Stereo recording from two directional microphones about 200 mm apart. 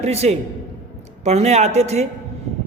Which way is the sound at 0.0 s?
30° right (ahead or behind).